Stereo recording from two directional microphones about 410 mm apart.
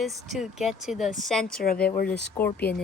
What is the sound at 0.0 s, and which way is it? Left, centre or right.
Speech, centre.